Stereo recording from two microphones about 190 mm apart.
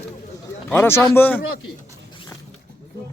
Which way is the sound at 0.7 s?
15° left (ahead or behind).